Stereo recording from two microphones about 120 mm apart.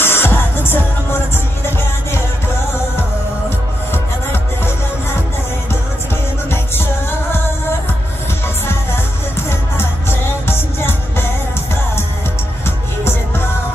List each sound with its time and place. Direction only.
0.0 s music: 20° left (ahead or behind)
3.4 s music: 20° left (ahead or behind)
6.5 s music: 20° left (ahead or behind)
9.5 s music: 20° left (ahead or behind)